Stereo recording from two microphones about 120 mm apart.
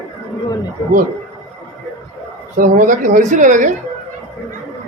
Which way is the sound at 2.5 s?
90° right.